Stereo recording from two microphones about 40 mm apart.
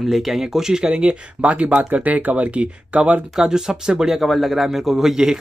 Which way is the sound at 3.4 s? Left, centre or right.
Centre.